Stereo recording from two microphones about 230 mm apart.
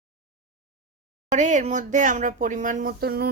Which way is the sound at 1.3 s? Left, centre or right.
Right.